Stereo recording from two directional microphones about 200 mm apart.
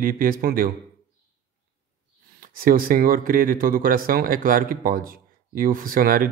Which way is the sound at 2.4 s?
45° right (ahead or behind).